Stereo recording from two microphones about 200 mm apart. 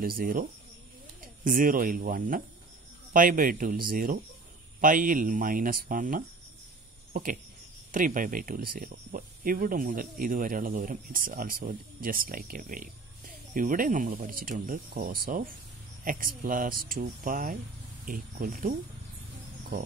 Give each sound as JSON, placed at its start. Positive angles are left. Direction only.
{"t": 0.0, "sound": "speech", "side_deg": -45}
{"t": 7.9, "sound": "speech", "side_deg": -45}